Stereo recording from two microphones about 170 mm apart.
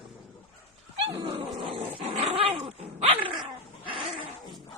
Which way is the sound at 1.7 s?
40° right (ahead or behind).